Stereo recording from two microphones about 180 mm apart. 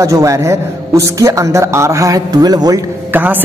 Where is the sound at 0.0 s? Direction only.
15° right (ahead or behind).